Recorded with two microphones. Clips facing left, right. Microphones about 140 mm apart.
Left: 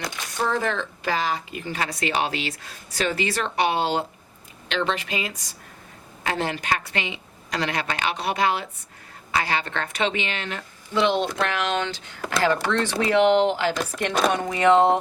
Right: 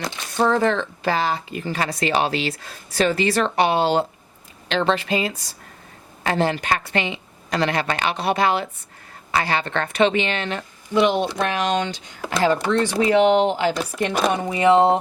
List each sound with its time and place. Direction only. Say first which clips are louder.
0.0 s a sound: right 5 dB; 25° right (ahead or behind)
0.5 s speech: right 6 dB; 35° right (ahead or behind)
9.7 s speech: right 7 dB; 55° right (ahead or behind)
10.2 s speech: right 6 dB; 30° right (ahead or behind)
11.0 s speech: right 2 dB; 15° right (ahead or behind)